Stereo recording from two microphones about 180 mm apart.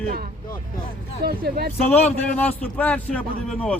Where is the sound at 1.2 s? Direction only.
60° right (ahead or behind).